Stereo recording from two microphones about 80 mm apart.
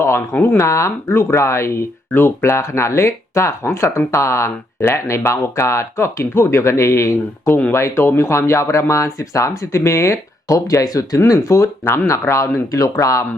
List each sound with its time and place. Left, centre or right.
0.5 s speech: left